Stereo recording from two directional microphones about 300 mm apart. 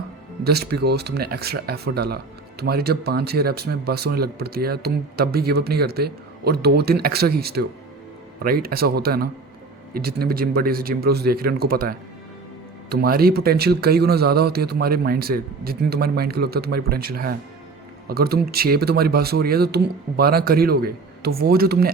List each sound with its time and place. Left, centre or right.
0.4 s speech: right